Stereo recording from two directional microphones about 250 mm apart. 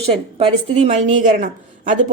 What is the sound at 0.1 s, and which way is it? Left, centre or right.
A woman's voice, right.